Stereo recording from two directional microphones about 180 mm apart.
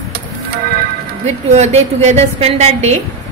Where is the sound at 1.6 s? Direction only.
40° right (ahead or behind).